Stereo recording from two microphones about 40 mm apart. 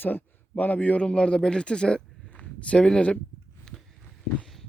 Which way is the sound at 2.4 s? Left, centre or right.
Left.